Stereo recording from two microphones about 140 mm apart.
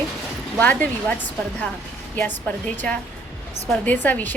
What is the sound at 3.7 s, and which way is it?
Speech, 10° left (ahead or behind).